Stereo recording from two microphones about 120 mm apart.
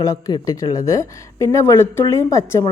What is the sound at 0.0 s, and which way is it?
A woman's voice, 30° left (ahead or behind).